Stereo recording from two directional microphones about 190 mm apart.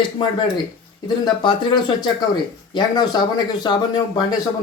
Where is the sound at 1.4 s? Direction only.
25° left (ahead or behind).